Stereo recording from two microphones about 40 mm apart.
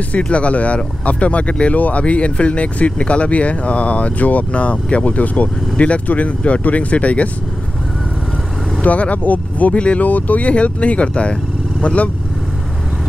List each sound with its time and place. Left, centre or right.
0.3 s speech: left
4.5 s speech: left
8.8 s speech: left